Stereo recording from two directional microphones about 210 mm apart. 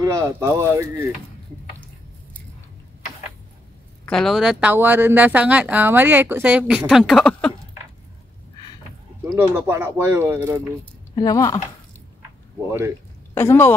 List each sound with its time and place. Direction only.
0.0 s speech: 15° right (ahead or behind)
4.0 s speech: 5° left (ahead or behind)
9.3 s speech: 10° right (ahead or behind)
11.1 s speech: 15° left (ahead or behind)
13.3 s a woman's voice: 10° left (ahead or behind)